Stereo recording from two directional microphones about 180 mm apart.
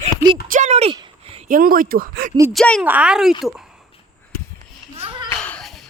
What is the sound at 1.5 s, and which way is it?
Speech, 50° right (ahead or behind).